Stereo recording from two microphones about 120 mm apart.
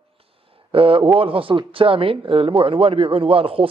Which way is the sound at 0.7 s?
45° right (ahead or behind).